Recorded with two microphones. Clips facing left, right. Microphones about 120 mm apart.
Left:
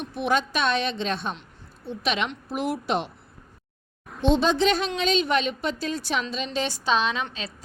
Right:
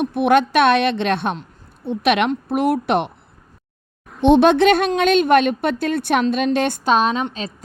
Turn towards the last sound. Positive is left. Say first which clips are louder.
# right 8 dB
turn(degrees=-40)  # may be behind; listen again after turning